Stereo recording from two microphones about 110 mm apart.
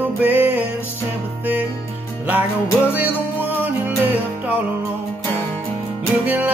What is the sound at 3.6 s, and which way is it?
Music, 15° right (ahead or behind).